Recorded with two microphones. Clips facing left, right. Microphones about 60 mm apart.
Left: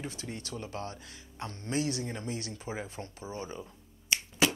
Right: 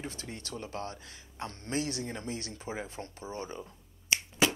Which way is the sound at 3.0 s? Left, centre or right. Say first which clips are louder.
Even; centre.